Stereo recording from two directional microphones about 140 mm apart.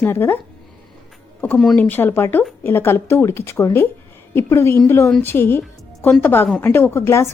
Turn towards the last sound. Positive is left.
turn(degrees=20)  # may be behind; listen again after turning